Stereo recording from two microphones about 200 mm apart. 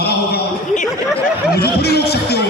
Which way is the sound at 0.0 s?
50° left (ahead or behind).